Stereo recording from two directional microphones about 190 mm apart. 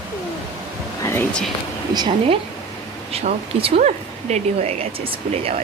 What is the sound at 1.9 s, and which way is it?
Speech, 20° right (ahead or behind).